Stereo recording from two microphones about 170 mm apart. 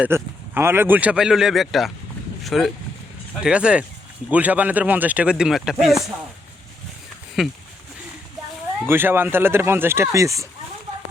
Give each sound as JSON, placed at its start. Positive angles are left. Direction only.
{"t": 0.0, "sound": "speech", "side_deg": -15}
{"t": 7.4, "sound": "speech", "side_deg": -5}
{"t": 8.9, "sound": "speech", "side_deg": -15}